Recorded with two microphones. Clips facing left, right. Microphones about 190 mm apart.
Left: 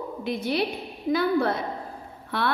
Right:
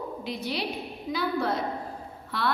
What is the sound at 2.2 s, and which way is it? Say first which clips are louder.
Speech: left 2 dB; 60° left (ahead or behind).